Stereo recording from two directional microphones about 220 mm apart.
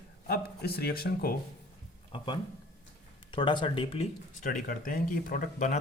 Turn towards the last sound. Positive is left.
turn(degrees=35)  # may be behind; listen again after turning